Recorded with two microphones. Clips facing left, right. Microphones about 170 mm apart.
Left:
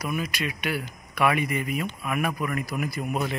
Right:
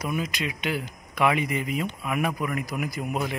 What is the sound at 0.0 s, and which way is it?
Speech, 20° right (ahead or behind).